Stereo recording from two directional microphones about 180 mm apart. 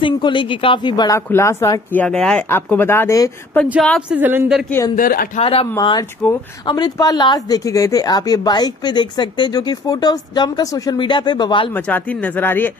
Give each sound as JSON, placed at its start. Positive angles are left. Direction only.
{"t": 0.0, "sound": "speech", "side_deg": 25}
{"t": 4.1, "sound": "speech", "side_deg": -10}
{"t": 4.6, "sound": "speech", "side_deg": 15}
{"t": 4.9, "sound": "speech", "side_deg": 50}
{"t": 5.4, "sound": "speech", "side_deg": 35}
{"t": 11.7, "sound": "speech", "side_deg": 10}